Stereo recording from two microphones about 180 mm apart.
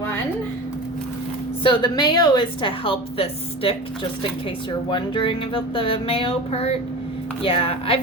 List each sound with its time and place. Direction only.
1.6 s a woman's voice: 25° left (ahead or behind)
4.9 s a woman's voice: 25° left (ahead or behind)